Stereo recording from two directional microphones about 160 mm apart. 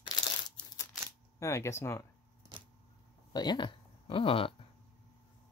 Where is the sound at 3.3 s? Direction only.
25° left (ahead or behind).